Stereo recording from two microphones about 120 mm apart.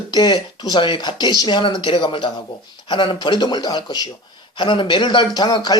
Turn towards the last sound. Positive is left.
turn(degrees=35)  # may be behind; listen again after turning